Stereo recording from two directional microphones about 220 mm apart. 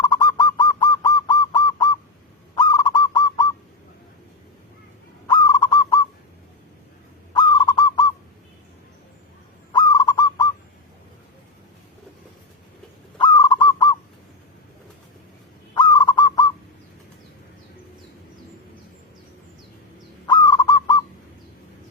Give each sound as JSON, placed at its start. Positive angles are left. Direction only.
{"t": 0.0, "sound": "bird", "side_deg": 20}
{"t": 2.6, "sound": "honk", "side_deg": 20}
{"t": 5.3, "sound": "owl", "side_deg": 20}
{"t": 7.3, "sound": "owl", "side_deg": 20}
{"t": 9.7, "sound": "owl", "side_deg": 20}
{"t": 13.1, "sound": "goose", "side_deg": 20}
{"t": 15.7, "sound": "bird", "side_deg": 20}
{"t": 20.2, "sound": "crow", "side_deg": 20}